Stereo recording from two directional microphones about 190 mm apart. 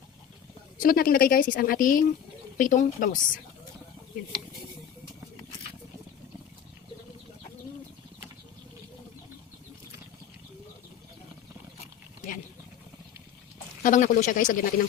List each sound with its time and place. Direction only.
0.8 s speech: 50° left (ahead or behind)
13.8 s speech: 45° left (ahead or behind)